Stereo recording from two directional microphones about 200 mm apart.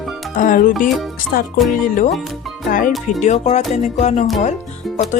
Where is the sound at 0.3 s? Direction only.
40° left (ahead or behind).